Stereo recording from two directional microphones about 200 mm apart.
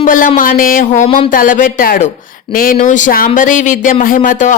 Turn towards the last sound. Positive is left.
turn(degrees=40)  # may be behind; listen again after turning